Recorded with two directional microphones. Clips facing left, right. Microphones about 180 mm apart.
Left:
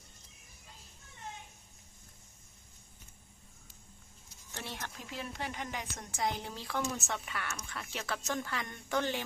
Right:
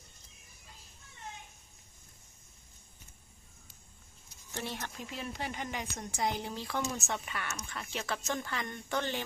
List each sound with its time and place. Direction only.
4.7 s speech: centre (ahead or behind)